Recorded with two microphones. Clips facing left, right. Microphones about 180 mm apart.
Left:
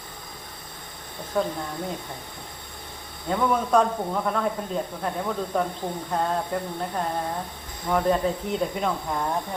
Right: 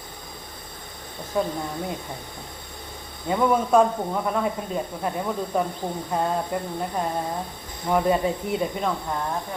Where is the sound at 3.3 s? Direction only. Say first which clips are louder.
Right 2 dB; 5° right (ahead or behind).